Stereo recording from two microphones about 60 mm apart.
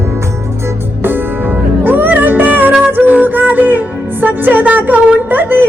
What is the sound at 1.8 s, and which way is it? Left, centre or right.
Music, right.